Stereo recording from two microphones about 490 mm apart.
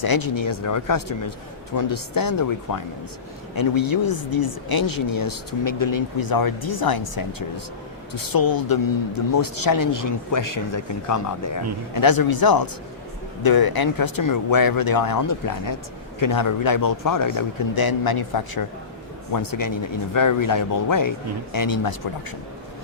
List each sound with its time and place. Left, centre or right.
0.0 s speech: left